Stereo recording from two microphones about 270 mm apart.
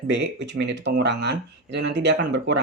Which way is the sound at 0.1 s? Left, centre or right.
Right.